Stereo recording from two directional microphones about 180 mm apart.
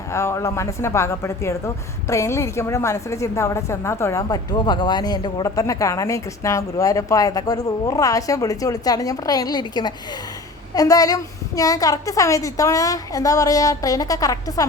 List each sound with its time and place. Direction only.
0.1 s a woman's voice: 15° left (ahead or behind)